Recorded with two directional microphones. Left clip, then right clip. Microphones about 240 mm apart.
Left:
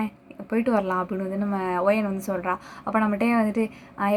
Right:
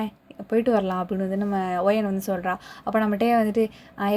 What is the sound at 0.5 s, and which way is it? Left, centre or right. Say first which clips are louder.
Speech: right 2 dB; right.